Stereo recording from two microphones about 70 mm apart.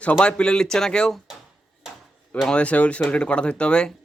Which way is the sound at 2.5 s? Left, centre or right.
Centre.